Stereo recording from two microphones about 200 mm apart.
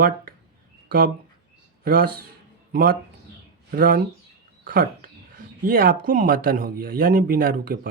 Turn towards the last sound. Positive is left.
turn(degrees=-45)  # may be behind; listen again after turning